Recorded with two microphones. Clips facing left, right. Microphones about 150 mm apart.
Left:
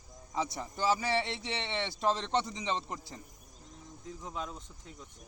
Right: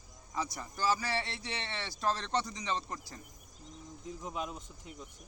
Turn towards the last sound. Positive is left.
turn(degrees=-15)  # may be behind; listen again after turning